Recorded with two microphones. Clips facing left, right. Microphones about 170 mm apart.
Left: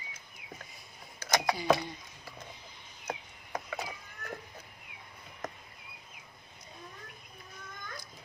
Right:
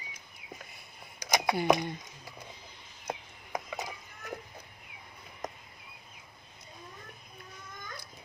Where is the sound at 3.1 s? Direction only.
10° right (ahead or behind).